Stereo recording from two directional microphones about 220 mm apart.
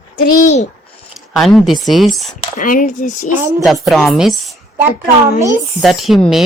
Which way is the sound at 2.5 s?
40° left (ahead or behind).